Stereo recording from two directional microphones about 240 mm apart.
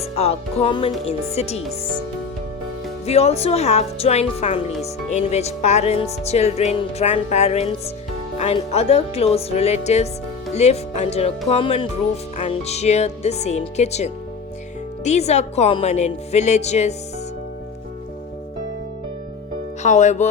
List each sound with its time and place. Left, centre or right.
0.0 s a woman's voice: left
3.1 s a woman's voice: left
19.8 s a woman's voice: left